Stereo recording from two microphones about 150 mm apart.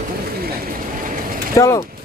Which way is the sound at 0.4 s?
75° right (ahead or behind).